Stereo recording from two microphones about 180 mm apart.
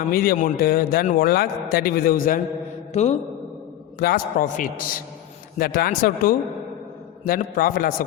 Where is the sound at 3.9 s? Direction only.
55° left (ahead or behind).